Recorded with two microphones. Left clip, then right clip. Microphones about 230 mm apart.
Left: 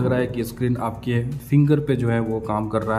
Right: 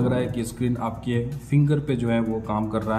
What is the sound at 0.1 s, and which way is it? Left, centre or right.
A man's voice, centre.